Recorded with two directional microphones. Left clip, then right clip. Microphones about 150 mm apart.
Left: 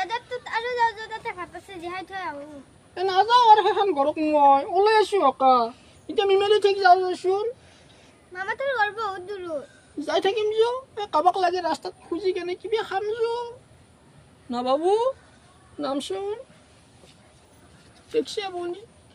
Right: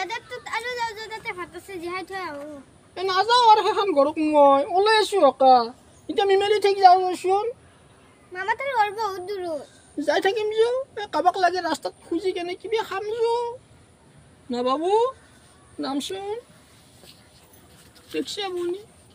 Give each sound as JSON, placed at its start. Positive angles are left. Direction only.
{"t": 0.0, "sound": "a sound", "side_deg": 0}
{"t": 2.9, "sound": "a woman's voice", "side_deg": 10}
{"t": 8.3, "sound": "a woman's voice", "side_deg": -5}
{"t": 9.9, "sound": "a woman's voice", "side_deg": 15}
{"t": 14.5, "sound": "a woman's voice", "side_deg": 15}
{"t": 18.1, "sound": "speech", "side_deg": 20}